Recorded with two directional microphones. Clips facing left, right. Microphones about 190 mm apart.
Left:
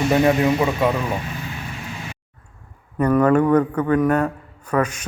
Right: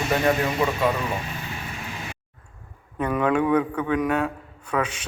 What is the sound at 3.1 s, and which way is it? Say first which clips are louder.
Speech: left 6 dB; centre (ahead or behind).